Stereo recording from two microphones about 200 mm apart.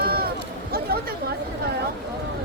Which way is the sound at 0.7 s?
50° right (ahead or behind).